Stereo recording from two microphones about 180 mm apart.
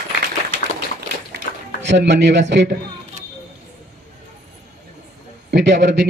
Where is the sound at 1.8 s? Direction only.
75° right (ahead or behind).